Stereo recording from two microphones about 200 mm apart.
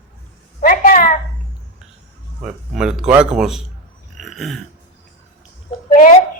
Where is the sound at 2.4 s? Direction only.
5° right (ahead or behind).